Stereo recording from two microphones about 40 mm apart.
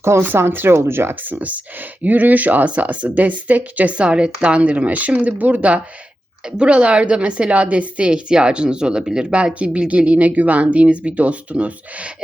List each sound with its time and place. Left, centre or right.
0.3 s speech: right
1.2 s speech: right
5.5 s a woman's voice: right